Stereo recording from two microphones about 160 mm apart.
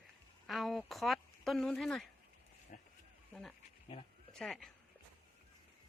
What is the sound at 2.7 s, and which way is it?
Sheep, 50° left (ahead or behind).